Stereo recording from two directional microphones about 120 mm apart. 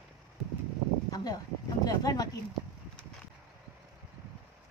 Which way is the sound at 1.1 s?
30° left (ahead or behind).